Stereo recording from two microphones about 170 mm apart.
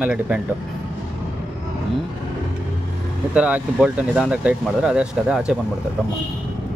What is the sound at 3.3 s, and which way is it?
Speech, 5° right (ahead or behind).